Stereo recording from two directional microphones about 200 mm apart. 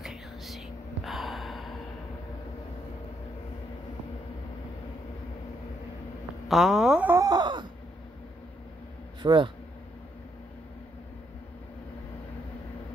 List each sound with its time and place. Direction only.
0.0 s whispering: centre (ahead or behind)
1.0 s gasp: centre (ahead or behind)
6.5 s wail: centre (ahead or behind); by 7.6 s 20° right (ahead or behind)
9.2 s speech: 25° right (ahead or behind)